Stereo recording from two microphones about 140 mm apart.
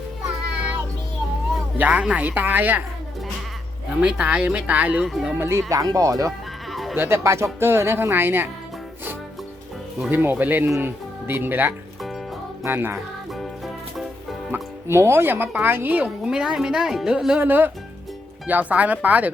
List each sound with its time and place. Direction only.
1.8 s speech: 10° right (ahead or behind)
4.0 s speech: 10° right (ahead or behind)
5.4 s speech: 20° right (ahead or behind)
6.7 s sheep: centre (ahead or behind)
6.9 s speech: 15° right (ahead or behind)
10.1 s speech: 15° right (ahead or behind)
14.5 s speech: 20° right (ahead or behind)